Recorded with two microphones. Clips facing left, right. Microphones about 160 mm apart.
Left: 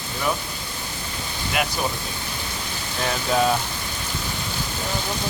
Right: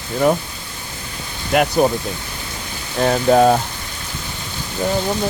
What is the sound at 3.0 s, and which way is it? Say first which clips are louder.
Speech: right 9 dB; 45° right (ahead or behind).